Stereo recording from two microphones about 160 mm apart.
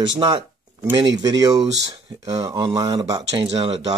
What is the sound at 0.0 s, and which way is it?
Speech, 30° right (ahead or behind).